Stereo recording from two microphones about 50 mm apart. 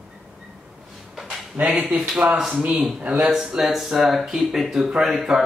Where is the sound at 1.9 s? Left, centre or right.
Centre.